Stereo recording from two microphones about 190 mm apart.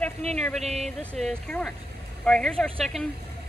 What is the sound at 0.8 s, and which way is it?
Speech, centre (ahead or behind).